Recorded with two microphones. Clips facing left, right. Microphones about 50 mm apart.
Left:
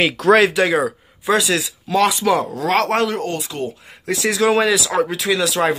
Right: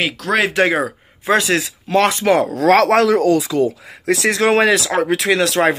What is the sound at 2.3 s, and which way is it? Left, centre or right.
Speech, right.